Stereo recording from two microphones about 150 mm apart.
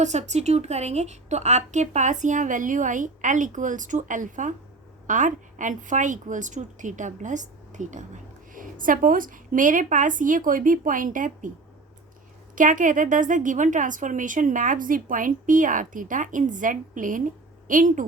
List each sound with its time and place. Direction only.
0.0 s a woman's voice: 50° right (ahead or behind)
12.5 s a woman's voice: 60° right (ahead or behind)